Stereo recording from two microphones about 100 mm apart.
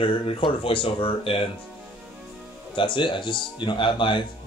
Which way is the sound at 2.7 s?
55° left (ahead or behind).